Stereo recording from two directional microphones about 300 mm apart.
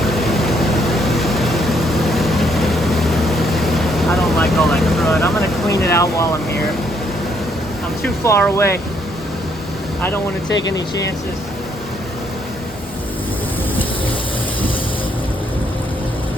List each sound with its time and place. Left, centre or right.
0.0 s vehicle: centre
5.9 s speech: centre
8.0 s speech: centre
10.5 s speech: left